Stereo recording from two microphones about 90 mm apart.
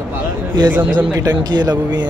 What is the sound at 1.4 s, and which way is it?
Speech, 50° right (ahead or behind).